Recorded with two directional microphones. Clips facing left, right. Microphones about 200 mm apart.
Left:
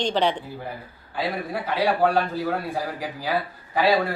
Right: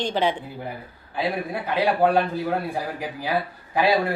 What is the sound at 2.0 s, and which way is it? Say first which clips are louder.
Speech: right 2 dB; 15° right (ahead or behind).